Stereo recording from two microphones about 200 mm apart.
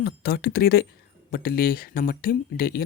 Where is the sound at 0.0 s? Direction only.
50° left (ahead or behind).